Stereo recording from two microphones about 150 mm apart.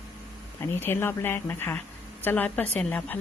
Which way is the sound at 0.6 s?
15° left (ahead or behind).